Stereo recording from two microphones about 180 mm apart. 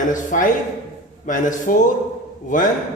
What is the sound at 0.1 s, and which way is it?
A man's voice, 45° left (ahead or behind).